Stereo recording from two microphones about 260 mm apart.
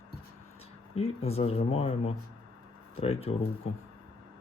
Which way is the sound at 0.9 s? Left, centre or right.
Left.